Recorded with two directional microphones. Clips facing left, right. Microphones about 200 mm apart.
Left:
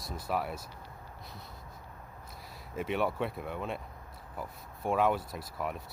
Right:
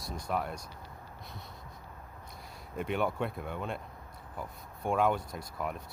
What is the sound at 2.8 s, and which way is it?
Speech, centre (ahead or behind).